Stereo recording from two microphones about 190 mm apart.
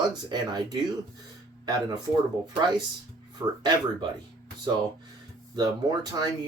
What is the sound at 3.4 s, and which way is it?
Speech, 20° right (ahead or behind).